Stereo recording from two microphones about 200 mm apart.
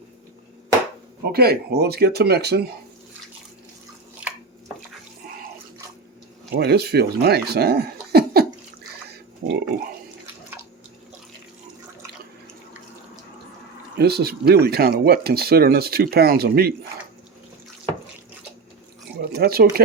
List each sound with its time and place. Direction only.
1.3 s speech: 50° right (ahead or behind)
6.6 s speech: 55° right (ahead or behind)
9.4 s pig: 50° right (ahead or behind)
14.0 s speech: 50° right (ahead or behind)
19.2 s speech: 50° right (ahead or behind)